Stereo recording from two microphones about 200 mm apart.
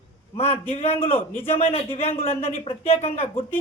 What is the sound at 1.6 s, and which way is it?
Speech, 30° left (ahead or behind).